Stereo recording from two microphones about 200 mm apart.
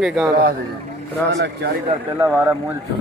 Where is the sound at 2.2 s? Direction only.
10° right (ahead or behind).